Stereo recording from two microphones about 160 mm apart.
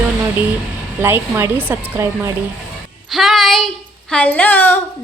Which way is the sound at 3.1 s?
Centre (ahead or behind).